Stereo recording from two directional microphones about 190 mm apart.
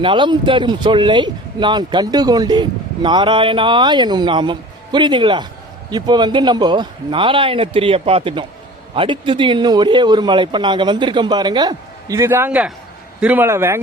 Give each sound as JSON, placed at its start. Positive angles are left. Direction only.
{"t": 0.0, "sound": "a man's voice", "side_deg": -25}